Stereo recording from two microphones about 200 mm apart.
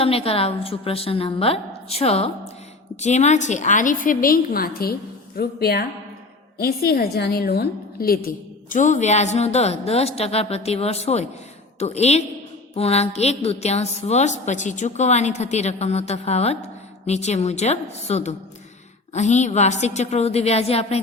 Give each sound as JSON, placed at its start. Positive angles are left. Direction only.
{"t": 0.0, "sound": "a woman's voice", "side_deg": 30}
{"t": 8.7, "sound": "a woman's voice", "side_deg": 35}